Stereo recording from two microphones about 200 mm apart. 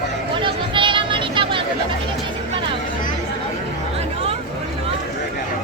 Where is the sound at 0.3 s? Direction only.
25° right (ahead or behind).